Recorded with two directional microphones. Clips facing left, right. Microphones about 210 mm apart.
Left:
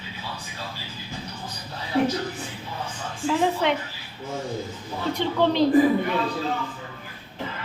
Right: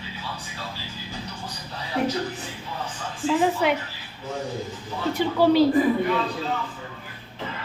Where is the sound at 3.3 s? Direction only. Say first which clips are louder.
Right 1 dB; 5° right (ahead or behind).